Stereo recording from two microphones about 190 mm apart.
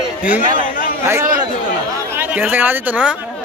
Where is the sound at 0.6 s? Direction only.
45° left (ahead or behind).